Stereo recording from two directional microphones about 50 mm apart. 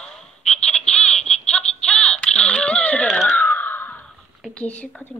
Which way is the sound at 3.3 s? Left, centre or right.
Left.